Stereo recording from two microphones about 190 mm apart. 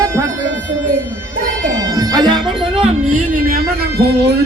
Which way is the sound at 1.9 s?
20° right (ahead or behind).